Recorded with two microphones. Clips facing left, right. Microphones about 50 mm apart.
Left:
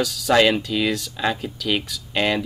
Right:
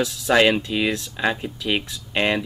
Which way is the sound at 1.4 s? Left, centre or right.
Right.